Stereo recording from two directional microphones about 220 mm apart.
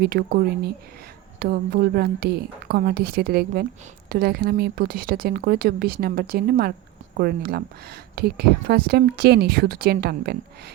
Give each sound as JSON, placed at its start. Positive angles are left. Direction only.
{"t": 0.0, "sound": "speech", "side_deg": -40}